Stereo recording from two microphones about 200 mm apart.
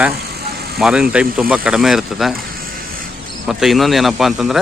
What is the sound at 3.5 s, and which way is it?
Speech, centre (ahead or behind).